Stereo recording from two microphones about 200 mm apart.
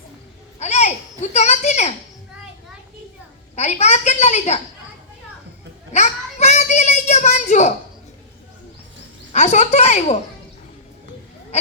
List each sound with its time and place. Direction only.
0.6 s a child's voice: 35° left (ahead or behind)
3.5 s a woman's voice: 35° left (ahead or behind)
5.9 s a woman's voice: 35° left (ahead or behind)
9.3 s a woman's voice: 35° left (ahead or behind)